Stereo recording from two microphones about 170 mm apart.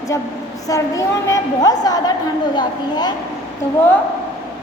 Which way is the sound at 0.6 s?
20° left (ahead or behind).